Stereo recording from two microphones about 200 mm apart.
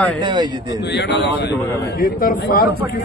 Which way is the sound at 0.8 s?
60° left (ahead or behind).